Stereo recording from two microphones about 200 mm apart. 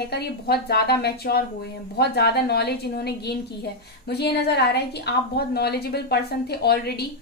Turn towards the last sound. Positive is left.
turn(degrees=55)  # may be behind; listen again after turning